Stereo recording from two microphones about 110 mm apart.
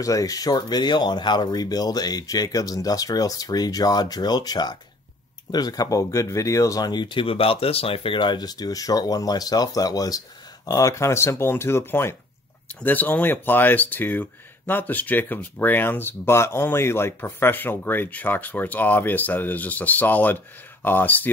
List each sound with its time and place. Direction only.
0.0 s speech: 30° left (ahead or behind); by 21.3 s 15° left (ahead or behind)